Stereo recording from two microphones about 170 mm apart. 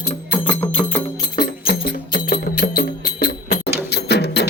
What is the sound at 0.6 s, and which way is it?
Music, 5° left (ahead or behind).